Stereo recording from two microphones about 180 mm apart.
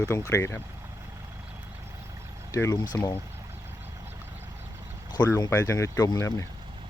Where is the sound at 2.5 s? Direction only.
15° left (ahead or behind).